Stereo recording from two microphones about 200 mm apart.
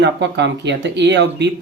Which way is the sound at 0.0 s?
60° right (ahead or behind).